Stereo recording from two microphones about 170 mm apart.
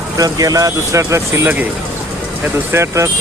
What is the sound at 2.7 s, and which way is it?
Speech, 15° right (ahead or behind).